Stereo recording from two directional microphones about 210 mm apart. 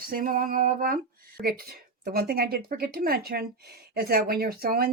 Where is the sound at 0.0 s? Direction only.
45° right (ahead or behind).